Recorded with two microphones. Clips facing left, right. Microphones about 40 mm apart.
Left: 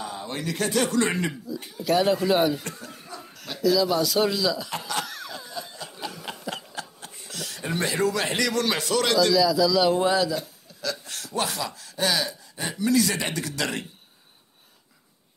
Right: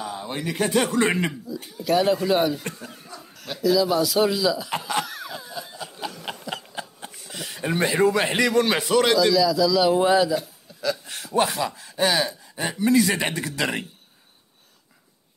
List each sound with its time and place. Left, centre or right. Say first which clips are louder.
0.0 s speech: right 2 dB; centre
1.8 s speech: right 1 dB; centre
4.6 s speech: right 4 dB; centre
5.0 s a sound: right 2 dB; centre
7.2 s a man's voice: right 4 dB; centre
10.0 s a man's voice: right 4 dB; centre